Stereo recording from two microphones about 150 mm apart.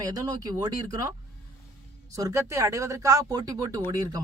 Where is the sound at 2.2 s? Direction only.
20° right (ahead or behind).